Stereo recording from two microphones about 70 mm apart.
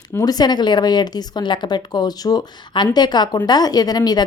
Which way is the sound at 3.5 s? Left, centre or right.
Left.